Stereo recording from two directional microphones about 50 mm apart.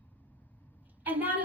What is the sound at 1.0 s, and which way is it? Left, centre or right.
Speech, right.